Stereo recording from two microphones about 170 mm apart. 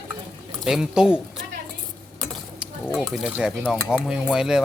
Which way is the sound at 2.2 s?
Centre (ahead or behind).